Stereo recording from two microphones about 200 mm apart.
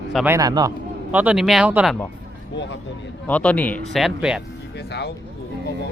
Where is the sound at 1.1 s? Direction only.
10° right (ahead or behind).